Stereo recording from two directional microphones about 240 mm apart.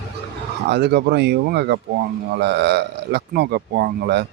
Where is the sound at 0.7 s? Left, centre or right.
Right.